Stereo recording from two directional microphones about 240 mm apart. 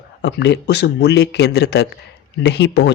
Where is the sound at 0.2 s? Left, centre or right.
Left.